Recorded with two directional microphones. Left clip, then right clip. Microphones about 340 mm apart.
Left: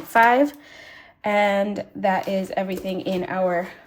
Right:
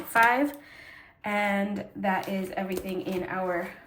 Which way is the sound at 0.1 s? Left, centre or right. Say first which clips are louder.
Left 6 dB; centre.